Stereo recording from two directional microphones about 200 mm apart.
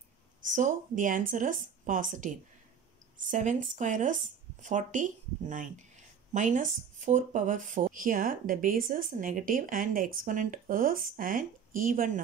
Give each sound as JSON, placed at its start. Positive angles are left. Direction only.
{"t": 0.6, "sound": "speech", "side_deg": -40}